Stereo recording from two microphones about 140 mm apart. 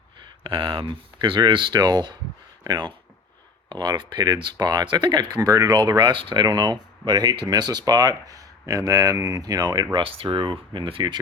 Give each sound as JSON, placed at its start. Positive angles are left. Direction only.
{"t": 0.4, "sound": "speech", "side_deg": -35}